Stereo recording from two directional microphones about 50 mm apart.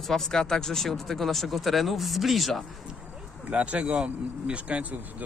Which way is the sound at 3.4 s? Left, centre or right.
Right.